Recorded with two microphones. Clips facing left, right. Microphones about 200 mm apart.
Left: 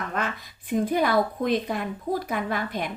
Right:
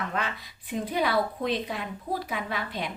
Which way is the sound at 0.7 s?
50° left (ahead or behind).